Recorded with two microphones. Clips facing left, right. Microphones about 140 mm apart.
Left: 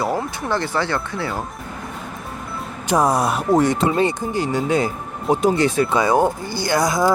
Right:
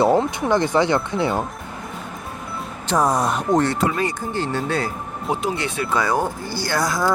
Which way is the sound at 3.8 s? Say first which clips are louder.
Left 3 dB; 25° left (ahead or behind).